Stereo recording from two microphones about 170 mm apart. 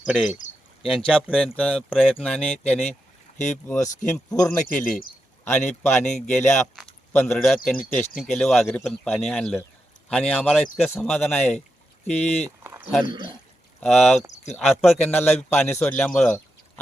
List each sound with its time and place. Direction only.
0.0 s a man's voice: centre (ahead or behind)
3.3 s speech: 45° left (ahead or behind)
4.1 s a man's voice: 10° left (ahead or behind)
4.8 s speech: 55° left (ahead or behind)
5.5 s a man's voice: 10° left (ahead or behind)
6.1 s speech: 45° left (ahead or behind)
6.4 s a man's voice: 15° left (ahead or behind)
12.0 s speech: 40° left (ahead or behind)
12.5 s a sound: 15° right (ahead or behind)
13.1 s speech: 25° right (ahead or behind)
13.8 s speech: 5° left (ahead or behind)
14.2 s speech: 40° left (ahead or behind)
14.5 s speech: centre (ahead or behind)
14.9 s a man's voice: 10° left (ahead or behind)